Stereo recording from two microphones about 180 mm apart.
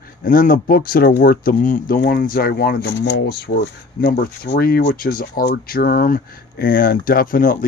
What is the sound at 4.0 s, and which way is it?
Speech, 55° left (ahead or behind).